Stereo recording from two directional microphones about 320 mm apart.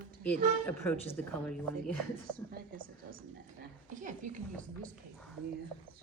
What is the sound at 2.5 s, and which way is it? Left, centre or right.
A woman's voice, right.